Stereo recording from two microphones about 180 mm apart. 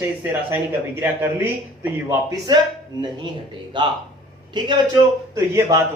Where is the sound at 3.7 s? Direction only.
25° right (ahead or behind).